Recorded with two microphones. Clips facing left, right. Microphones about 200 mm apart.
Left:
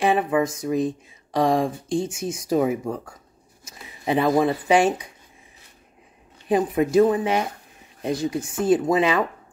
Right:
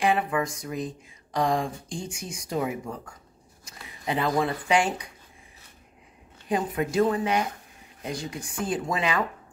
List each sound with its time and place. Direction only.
0.0 s speech: 20° left (ahead or behind)
6.5 s speech: 20° left (ahead or behind)